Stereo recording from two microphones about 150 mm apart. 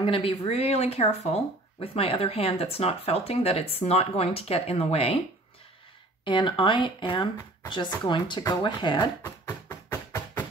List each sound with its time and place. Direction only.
0.0 s speech: 40° left (ahead or behind)
6.2 s speech: 35° left (ahead or behind)
9.8 s music: 15° left (ahead or behind)